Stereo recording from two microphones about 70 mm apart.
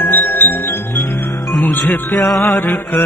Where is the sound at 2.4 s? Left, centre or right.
Left.